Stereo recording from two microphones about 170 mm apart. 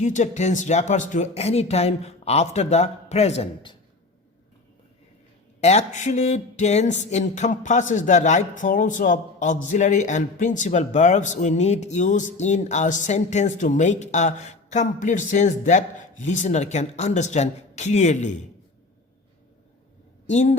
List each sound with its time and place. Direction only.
0.0 s speech: 45° left (ahead or behind)
5.5 s a sound: 40° left (ahead or behind)
20.2 s speech: 40° left (ahead or behind)